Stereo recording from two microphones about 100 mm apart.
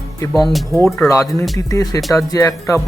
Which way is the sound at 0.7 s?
Centre (ahead or behind).